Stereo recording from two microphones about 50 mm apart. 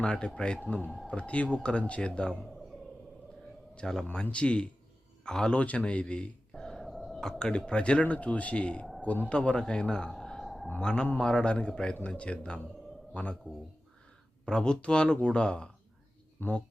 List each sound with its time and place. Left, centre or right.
0.0 s speech: centre
3.8 s speech: centre
4.1 s a man's voice: left
5.5 s speech: left
6.5 s a sound: centre
6.7 s a sound: centre
7.2 s speech: centre
10.4 s a sound: centre
10.8 s speech: centre
14.4 s speech: centre
16.4 s speech: left